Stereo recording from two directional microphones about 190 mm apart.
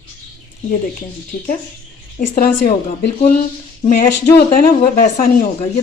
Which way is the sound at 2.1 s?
45° left (ahead or behind).